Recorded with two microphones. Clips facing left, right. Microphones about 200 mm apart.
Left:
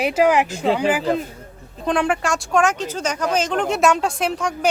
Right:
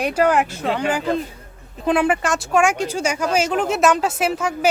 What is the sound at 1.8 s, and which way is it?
Speech, 5° right (ahead or behind).